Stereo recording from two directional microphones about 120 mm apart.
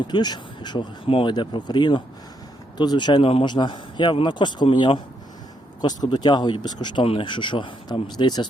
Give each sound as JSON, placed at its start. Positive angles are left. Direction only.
{"t": 0.1, "sound": "speech", "side_deg": 35}
{"t": 5.8, "sound": "speech", "side_deg": 35}